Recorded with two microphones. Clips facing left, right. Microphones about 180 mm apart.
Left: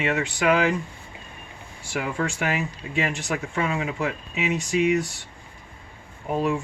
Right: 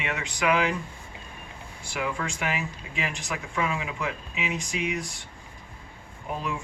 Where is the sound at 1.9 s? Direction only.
45° left (ahead or behind).